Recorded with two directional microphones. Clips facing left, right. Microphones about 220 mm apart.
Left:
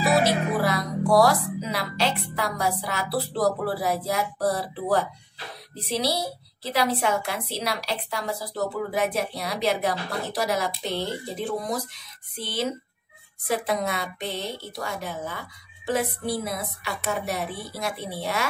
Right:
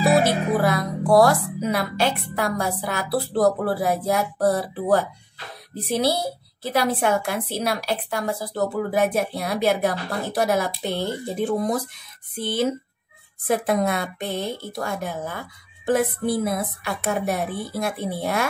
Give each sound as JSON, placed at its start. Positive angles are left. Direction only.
{"t": 0.2, "sound": "a woman's voice", "side_deg": -50}